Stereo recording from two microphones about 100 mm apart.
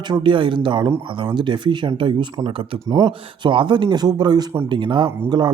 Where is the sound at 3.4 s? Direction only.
55° right (ahead or behind).